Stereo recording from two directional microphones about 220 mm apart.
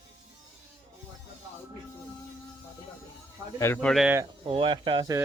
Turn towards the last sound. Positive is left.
turn(degrees=-20)  # may be behind; listen again after turning